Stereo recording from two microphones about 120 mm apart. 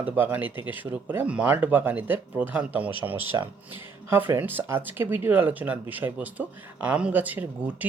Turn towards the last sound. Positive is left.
turn(degrees=-15)  # may be behind; listen again after turning